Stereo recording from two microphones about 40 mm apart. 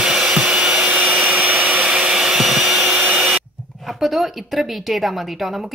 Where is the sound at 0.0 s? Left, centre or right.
Centre.